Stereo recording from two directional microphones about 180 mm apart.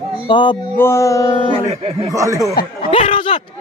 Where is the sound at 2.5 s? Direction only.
55° left (ahead or behind).